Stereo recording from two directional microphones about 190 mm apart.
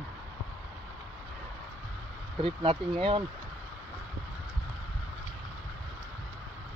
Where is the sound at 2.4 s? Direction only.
30° right (ahead or behind).